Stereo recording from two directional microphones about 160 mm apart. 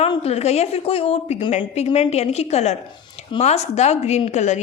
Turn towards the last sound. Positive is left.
turn(degrees=45)  # may be behind; listen again after turning